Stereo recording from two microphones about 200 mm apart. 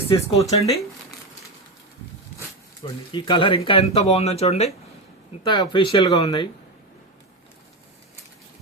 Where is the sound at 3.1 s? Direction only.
25° left (ahead or behind).